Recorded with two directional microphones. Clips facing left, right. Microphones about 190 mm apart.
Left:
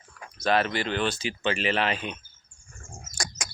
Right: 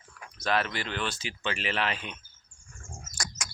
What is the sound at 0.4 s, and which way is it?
Speech, 30° left (ahead or behind).